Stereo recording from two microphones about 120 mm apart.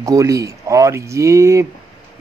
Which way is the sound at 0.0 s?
25° right (ahead or behind).